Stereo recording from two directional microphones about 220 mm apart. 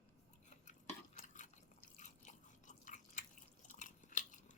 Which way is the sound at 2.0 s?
35° left (ahead or behind).